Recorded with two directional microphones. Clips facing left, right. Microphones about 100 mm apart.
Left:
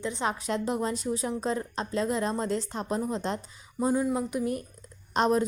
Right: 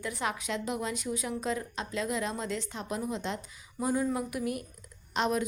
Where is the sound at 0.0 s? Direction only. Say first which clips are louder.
Left 3 dB; 25° left (ahead or behind).